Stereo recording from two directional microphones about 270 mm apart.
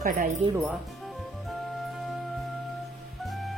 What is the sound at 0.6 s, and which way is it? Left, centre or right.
Music, centre.